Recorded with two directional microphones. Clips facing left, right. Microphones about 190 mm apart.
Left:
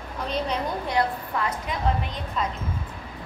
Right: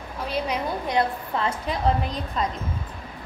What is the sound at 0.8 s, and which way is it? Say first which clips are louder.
A woman's voice: right 2 dB; 25° right (ahead or behind).